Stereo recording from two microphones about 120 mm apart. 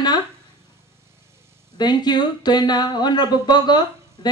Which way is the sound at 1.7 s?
35° left (ahead or behind).